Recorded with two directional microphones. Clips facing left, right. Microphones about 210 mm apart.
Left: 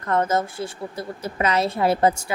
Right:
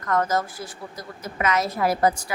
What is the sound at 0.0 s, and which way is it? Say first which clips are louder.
A woman's voice: left 2 dB; 30° left (ahead or behind).